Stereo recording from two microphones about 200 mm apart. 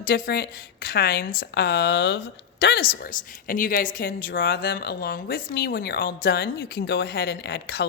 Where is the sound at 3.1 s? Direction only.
45° left (ahead or behind).